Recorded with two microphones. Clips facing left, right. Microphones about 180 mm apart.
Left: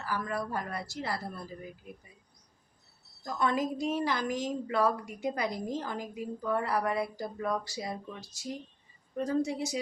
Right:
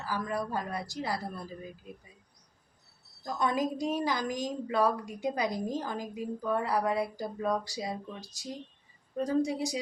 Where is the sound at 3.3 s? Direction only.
15° right (ahead or behind).